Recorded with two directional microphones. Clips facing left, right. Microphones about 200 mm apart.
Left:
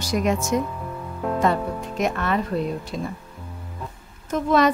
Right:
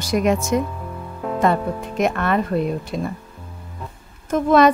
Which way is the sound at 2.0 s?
55° right (ahead or behind).